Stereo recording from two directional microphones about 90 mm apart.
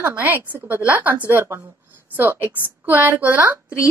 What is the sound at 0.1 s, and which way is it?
A woman's voice, 20° right (ahead or behind).